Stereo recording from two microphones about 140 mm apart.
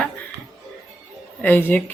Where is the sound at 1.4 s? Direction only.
15° left (ahead or behind).